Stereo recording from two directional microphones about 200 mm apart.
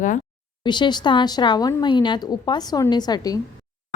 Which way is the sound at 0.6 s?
20° left (ahead or behind).